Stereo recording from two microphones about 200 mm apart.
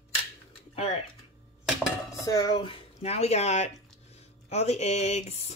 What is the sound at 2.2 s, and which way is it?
Speech, 15° left (ahead or behind).